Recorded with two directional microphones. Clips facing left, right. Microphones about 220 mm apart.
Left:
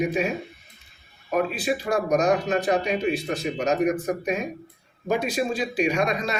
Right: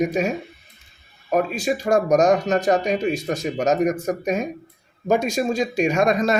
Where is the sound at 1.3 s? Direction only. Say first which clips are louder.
Right 3 dB; 45° right (ahead or behind).